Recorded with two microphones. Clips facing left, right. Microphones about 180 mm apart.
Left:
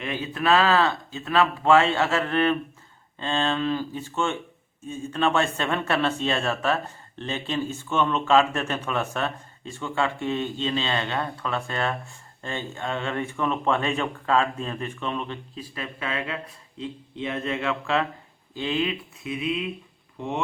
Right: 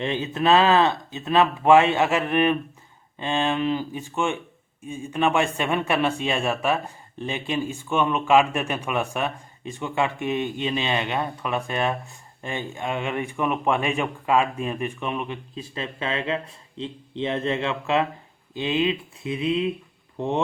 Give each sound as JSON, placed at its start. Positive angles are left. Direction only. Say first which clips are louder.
{"t": 0.0, "sound": "a man's voice", "louder": "right 4 dB", "side_deg": -25}